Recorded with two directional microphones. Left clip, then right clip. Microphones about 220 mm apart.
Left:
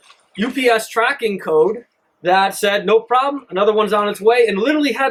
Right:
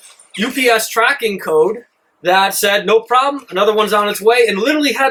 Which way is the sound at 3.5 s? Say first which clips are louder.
Right 2 dB; 5° left (ahead or behind).